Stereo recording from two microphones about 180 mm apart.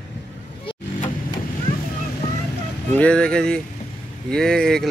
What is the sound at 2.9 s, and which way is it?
Speech, 5° left (ahead or behind).